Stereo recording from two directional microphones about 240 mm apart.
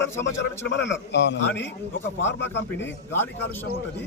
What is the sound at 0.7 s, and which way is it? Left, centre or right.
Speech, left.